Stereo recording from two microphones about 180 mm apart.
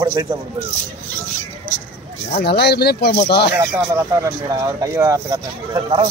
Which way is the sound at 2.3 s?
65° left (ahead or behind).